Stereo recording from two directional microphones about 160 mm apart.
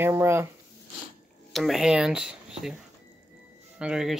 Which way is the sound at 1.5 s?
Centre (ahead or behind).